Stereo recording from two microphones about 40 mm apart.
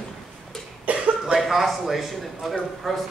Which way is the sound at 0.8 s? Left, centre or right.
Right.